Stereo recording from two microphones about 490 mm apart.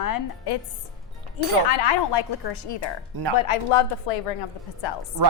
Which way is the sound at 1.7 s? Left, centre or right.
Left.